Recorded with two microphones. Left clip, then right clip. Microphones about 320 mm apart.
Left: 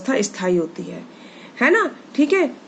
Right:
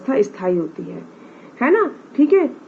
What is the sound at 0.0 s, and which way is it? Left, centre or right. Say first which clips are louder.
Speech: right 3 dB; centre.